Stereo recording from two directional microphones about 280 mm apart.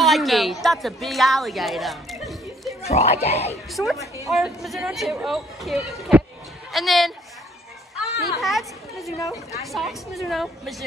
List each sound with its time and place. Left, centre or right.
0.0 s a woman's voice: centre
2.9 s speech: left
3.7 s a woman's voice: centre
8.4 s speech: centre